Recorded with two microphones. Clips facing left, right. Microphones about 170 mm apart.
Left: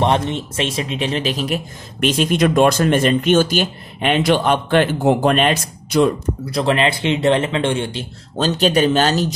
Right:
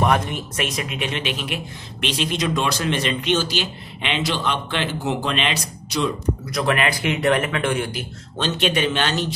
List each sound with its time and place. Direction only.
0.0 s a man's voice: 25° left (ahead or behind); by 6.1 s 50° left (ahead or behind)
6.4 s a man's voice: 30° left (ahead or behind)